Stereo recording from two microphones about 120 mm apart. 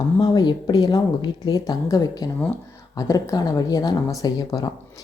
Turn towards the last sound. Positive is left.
turn(degrees=35)  # may be behind; listen again after turning